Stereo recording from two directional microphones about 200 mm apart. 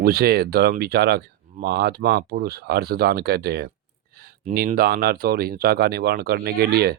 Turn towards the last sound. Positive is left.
turn(degrees=-50)  # may be behind; listen again after turning